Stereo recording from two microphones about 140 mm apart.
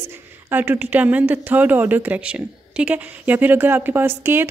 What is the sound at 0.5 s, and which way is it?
Speech, 15° right (ahead or behind).